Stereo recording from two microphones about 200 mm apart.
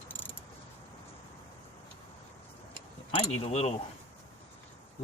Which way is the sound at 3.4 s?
30° left (ahead or behind).